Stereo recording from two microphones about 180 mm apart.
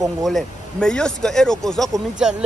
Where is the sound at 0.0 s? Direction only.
Centre (ahead or behind).